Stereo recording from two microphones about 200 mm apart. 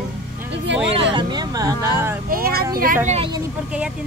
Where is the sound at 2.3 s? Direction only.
45° right (ahead or behind).